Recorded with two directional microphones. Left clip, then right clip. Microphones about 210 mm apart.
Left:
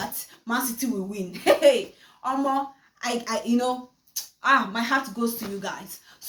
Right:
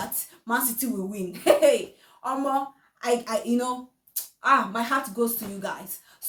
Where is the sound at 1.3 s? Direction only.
15° right (ahead or behind).